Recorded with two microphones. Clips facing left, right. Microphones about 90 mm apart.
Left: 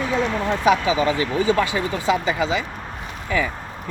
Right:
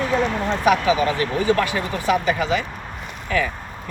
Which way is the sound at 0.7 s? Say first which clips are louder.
Right 1 dB; 20° left (ahead or behind).